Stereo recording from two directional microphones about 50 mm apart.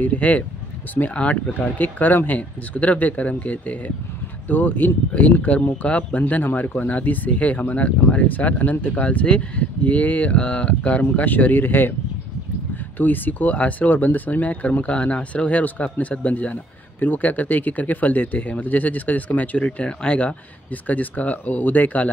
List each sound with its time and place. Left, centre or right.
0.0 s speech: left
12.9 s speech: left